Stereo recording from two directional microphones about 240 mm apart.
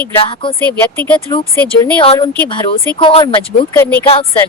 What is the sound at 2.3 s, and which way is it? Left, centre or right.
Speech, centre.